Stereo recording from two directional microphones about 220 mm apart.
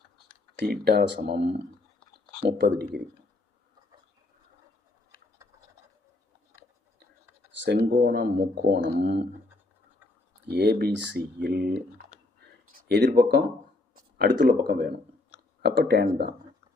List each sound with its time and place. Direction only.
0.6 s speech: 45° right (ahead or behind)
2.5 s speech: 45° right (ahead or behind)
7.6 s speech: 50° right (ahead or behind)
10.5 s speech: 50° right (ahead or behind)